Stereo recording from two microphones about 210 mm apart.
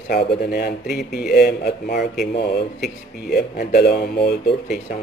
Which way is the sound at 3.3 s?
50° left (ahead or behind).